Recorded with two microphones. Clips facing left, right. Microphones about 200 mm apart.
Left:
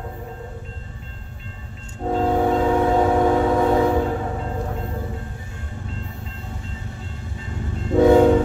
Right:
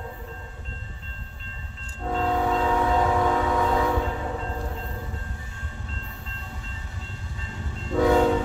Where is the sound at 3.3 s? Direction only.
30° left (ahead or behind).